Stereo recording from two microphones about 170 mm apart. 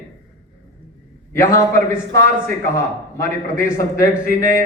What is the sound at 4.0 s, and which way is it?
Speech, 15° left (ahead or behind).